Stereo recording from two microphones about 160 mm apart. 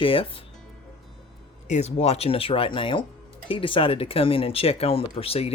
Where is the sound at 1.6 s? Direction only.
45° left (ahead or behind).